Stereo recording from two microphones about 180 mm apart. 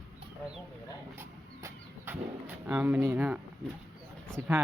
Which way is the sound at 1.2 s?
10° right (ahead or behind).